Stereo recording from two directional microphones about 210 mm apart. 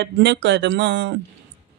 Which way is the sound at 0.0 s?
55° right (ahead or behind).